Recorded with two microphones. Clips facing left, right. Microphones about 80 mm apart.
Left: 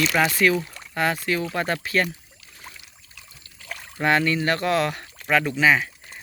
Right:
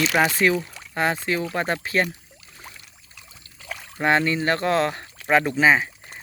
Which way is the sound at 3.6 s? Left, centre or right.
Centre.